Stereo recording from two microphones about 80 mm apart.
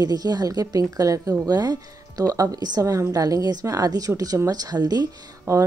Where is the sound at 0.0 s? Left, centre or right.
Right.